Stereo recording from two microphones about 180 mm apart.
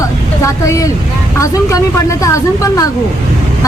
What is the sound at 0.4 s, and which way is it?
Speech, 15° left (ahead or behind).